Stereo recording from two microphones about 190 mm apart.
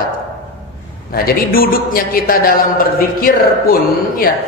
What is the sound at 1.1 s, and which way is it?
A man's voice, 50° left (ahead or behind).